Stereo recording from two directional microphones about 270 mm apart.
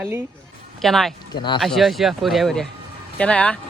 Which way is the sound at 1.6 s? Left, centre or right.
Centre.